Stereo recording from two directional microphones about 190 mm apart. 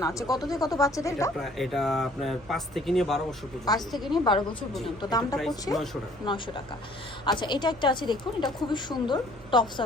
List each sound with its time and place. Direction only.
0.0 s a woman's voice: 15° left (ahead or behind)
1.4 s speech: centre (ahead or behind)
4.1 s a woman's voice: 25° left (ahead or behind)
5.7 s speech: centre (ahead or behind)
6.2 s a woman's voice: 25° left (ahead or behind)